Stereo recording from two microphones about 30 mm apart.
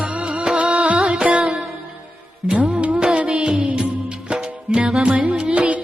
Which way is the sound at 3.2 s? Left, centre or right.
Right.